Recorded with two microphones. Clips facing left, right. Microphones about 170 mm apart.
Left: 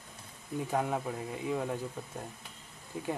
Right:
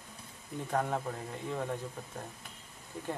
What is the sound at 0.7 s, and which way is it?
Speech, 10° left (ahead or behind).